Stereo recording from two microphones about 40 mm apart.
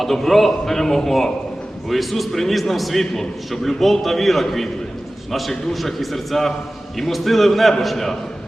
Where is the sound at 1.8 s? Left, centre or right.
Centre.